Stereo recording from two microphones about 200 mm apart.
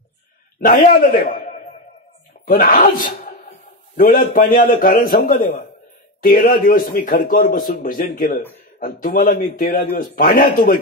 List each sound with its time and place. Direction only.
0.6 s a man's voice: 45° left (ahead or behind)
2.4 s a man's voice: 45° left (ahead or behind)